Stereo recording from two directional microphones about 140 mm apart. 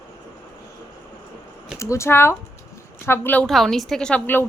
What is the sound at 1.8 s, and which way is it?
Speech, 20° left (ahead or behind).